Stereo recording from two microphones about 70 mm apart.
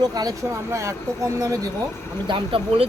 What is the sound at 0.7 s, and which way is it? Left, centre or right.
Speech, right.